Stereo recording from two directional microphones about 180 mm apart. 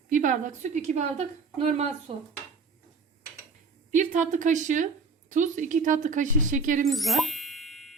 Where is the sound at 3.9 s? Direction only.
45° right (ahead or behind).